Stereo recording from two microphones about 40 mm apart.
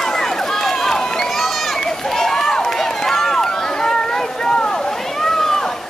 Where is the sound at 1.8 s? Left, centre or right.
Centre.